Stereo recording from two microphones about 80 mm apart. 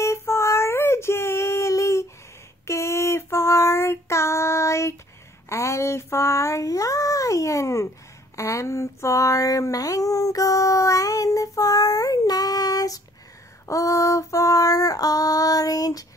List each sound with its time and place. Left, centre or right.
0.0 s child singing: left
2.6 s a sound: left
13.7 s female singing: left